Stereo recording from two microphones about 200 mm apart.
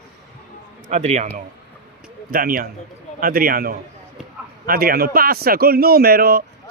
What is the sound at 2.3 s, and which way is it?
A man's voice, 45° right (ahead or behind).